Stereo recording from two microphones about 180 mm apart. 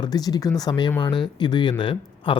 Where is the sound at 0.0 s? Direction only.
20° left (ahead or behind).